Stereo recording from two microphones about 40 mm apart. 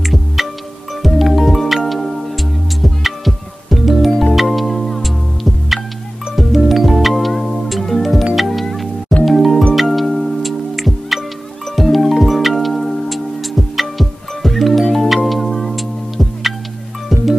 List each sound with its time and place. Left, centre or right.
0.0 s music: centre